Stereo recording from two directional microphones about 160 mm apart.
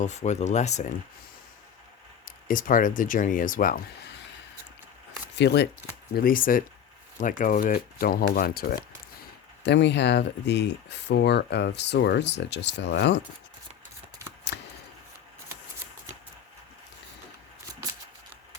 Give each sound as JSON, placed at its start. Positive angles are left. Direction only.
{"t": 0.0, "sound": "speech", "side_deg": 45}
{"t": 2.2, "sound": "speech", "side_deg": 60}
{"t": 5.3, "sound": "speech", "side_deg": 90}
{"t": 6.1, "sound": "speech", "side_deg": 60}
{"t": 9.6, "sound": "speech", "side_deg": 90}